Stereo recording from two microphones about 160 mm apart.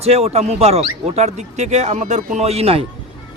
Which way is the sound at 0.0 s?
40° right (ahead or behind).